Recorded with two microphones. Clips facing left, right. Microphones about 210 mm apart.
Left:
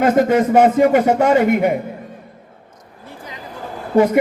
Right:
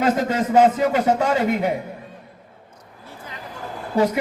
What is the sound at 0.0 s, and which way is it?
A man's voice, 55° left (ahead or behind).